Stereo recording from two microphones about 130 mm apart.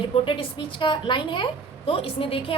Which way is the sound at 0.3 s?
40° left (ahead or behind).